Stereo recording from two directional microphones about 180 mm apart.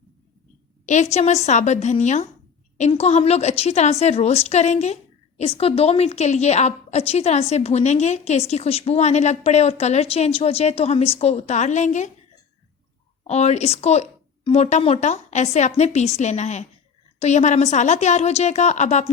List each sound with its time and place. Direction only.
0.9 s a woman's voice: 40° left (ahead or behind)
13.2 s a woman's voice: 35° left (ahead or behind)